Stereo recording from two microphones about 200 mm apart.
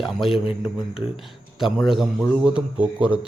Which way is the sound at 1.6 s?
Centre (ahead or behind).